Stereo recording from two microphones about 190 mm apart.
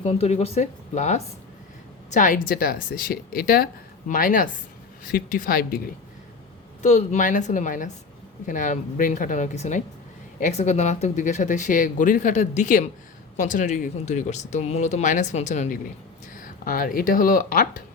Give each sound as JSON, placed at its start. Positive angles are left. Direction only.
{"t": 0.0, "sound": "a woman's voice", "side_deg": 35}
{"t": 6.8, "sound": "speech", "side_deg": 40}